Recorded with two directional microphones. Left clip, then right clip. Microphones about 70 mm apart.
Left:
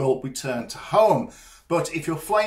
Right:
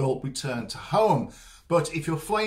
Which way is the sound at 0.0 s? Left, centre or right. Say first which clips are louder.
Left 4 dB; right.